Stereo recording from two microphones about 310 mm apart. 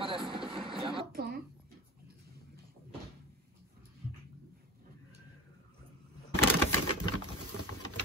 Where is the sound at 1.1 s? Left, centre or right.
Right.